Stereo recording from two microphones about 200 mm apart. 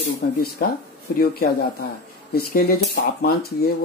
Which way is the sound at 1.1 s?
50° left (ahead or behind).